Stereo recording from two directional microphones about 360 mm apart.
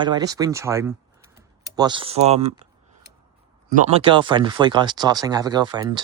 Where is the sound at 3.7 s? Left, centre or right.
Centre.